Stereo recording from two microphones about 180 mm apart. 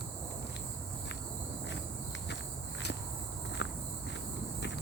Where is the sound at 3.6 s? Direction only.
80° left.